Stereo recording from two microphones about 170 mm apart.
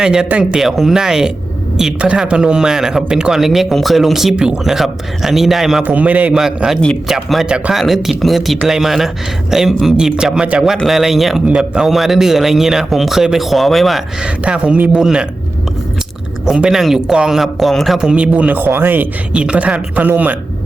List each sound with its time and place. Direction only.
0.0 s speech: 5° right (ahead or behind)
16.5 s speech: 5° right (ahead or behind)